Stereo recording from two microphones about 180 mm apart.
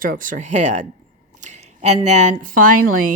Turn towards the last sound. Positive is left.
turn(degrees=-50)  # may be behind; listen again after turning